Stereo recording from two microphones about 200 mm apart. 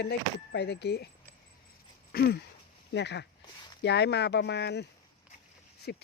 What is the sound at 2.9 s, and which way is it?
Speech, 60° left (ahead or behind).